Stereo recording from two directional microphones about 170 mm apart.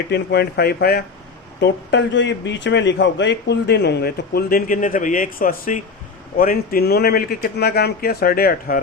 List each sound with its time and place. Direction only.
0.1 s speech: 75° left (ahead or behind)
1.6 s a man's voice: 90° left; by 8.8 s 60° left (ahead or behind)